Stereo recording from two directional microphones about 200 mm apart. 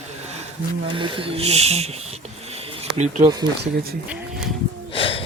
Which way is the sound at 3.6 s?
50° right (ahead or behind).